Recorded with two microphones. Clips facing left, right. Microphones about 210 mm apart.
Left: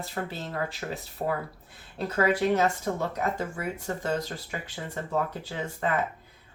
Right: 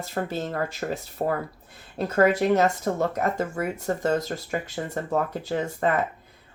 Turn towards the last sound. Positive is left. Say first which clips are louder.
# right 6 dB
turn(degrees=-40)  # may be behind; listen again after turning